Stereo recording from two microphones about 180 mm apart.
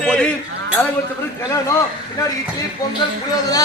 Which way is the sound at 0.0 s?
5° left (ahead or behind).